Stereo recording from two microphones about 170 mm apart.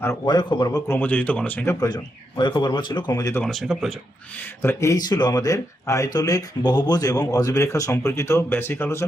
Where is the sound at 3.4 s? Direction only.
Centre (ahead or behind).